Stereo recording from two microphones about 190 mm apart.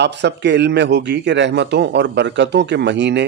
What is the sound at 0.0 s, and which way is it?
A man's voice, 65° right (ahead or behind).